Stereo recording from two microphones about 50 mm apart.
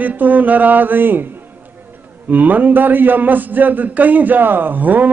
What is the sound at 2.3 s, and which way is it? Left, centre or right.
A man's voice, right.